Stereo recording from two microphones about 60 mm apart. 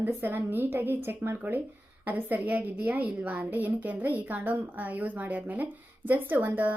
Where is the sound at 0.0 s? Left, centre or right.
Right.